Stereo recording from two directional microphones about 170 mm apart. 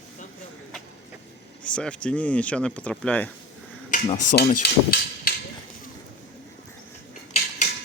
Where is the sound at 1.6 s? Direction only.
5° left (ahead or behind).